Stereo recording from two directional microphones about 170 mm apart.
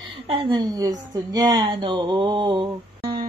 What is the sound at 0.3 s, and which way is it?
A woman's voice, 30° right (ahead or behind).